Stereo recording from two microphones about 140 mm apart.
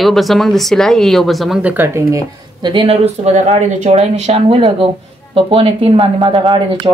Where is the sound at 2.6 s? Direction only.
35° right (ahead or behind).